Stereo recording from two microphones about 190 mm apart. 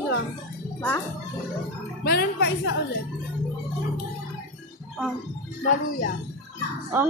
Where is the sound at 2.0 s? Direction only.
55° left (ahead or behind).